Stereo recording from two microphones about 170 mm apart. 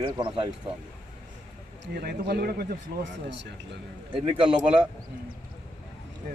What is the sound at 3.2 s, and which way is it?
Speech, 90° right.